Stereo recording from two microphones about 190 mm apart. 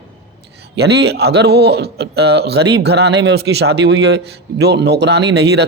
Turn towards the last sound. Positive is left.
turn(degrees=-60)  # may be behind; listen again after turning